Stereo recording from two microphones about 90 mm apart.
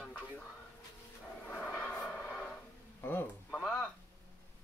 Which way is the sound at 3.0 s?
20° left (ahead or behind).